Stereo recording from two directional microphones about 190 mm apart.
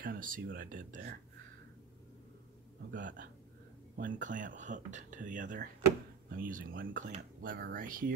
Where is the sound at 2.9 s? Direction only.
45° right (ahead or behind).